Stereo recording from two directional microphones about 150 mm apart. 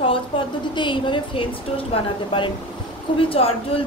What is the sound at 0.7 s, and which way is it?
A woman's voice, 35° left (ahead or behind).